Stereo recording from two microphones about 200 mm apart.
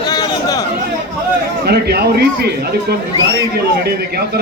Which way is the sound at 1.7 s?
55° right (ahead or behind).